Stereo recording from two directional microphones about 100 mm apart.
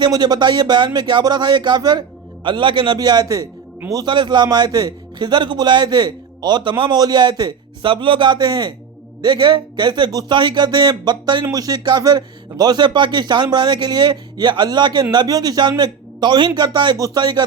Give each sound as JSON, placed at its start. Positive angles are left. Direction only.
{"t": 0.0, "sound": "a man's voice", "side_deg": -45}
{"t": 7.9, "sound": "a man's voice", "side_deg": -60}